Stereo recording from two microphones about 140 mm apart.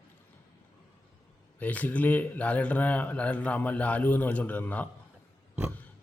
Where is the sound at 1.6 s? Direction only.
10° left (ahead or behind).